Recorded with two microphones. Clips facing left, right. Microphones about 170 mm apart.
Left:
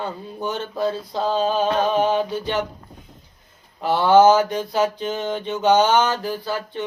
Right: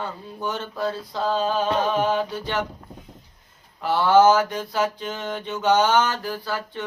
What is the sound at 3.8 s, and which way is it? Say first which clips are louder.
Mantra: left 2 dB; 20° left (ahead or behind).